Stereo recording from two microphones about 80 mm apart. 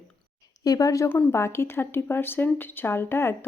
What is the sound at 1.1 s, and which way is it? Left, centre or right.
Speech, left.